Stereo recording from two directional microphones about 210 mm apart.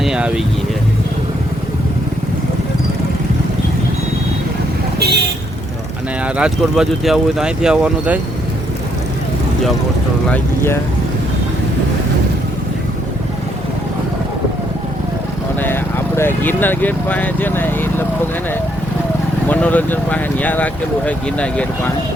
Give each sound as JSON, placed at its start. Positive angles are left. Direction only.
{"t": 0.0, "sound": "speech", "side_deg": -5}
{"t": 4.9, "sound": "vehicle", "side_deg": -50}
{"t": 6.2, "sound": "speech", "side_deg": -5}
{"t": 10.2, "sound": "speech", "side_deg": 5}
{"t": 15.6, "sound": "speech", "side_deg": 10}
{"t": 19.5, "sound": "speech", "side_deg": 5}